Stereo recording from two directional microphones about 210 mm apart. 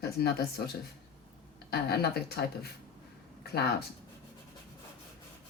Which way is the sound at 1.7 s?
50° left (ahead or behind).